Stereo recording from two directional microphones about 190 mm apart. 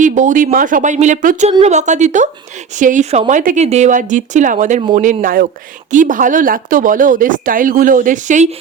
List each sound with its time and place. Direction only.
0.0 s speech: 40° right (ahead or behind)